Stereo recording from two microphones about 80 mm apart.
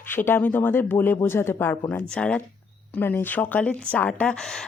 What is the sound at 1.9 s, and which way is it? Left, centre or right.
Speech, centre.